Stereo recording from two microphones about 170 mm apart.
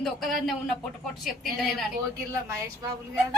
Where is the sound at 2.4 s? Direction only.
20° right (ahead or behind).